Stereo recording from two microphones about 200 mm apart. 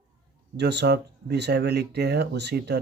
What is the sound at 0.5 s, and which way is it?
Speech, 55° right (ahead or behind).